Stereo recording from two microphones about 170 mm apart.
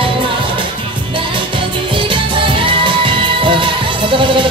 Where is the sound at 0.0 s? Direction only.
30° right (ahead or behind).